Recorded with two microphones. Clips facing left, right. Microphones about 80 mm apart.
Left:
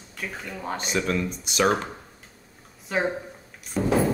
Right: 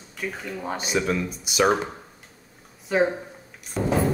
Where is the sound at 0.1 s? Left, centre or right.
Centre.